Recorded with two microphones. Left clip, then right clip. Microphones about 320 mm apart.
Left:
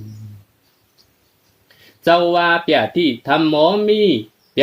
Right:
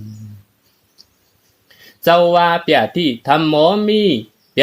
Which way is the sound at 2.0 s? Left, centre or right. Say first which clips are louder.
Right 2 dB; right.